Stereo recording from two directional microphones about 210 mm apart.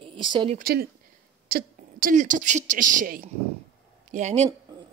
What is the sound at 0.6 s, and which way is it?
A woman's voice, 45° right (ahead or behind).